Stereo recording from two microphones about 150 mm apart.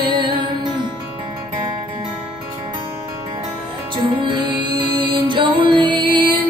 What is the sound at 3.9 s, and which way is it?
Music, 35° right (ahead or behind).